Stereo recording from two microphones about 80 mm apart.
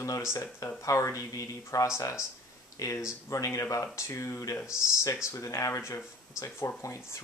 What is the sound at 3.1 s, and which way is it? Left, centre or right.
Speech, left.